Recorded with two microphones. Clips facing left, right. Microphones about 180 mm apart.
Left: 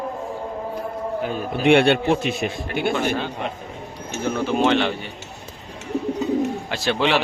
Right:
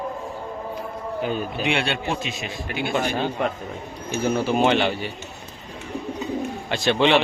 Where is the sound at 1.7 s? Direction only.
55° left (ahead or behind).